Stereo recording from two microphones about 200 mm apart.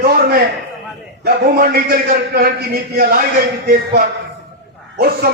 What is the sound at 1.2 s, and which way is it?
A man's voice, 45° right (ahead or behind).